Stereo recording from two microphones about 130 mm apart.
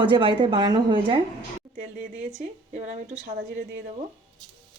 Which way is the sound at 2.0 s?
90° right.